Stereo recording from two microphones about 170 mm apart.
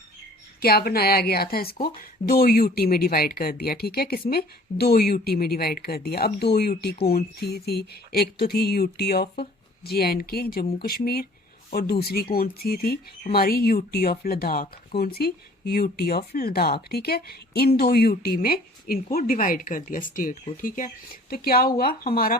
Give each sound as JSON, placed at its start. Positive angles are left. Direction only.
{"t": 0.6, "sound": "speech", "side_deg": 65}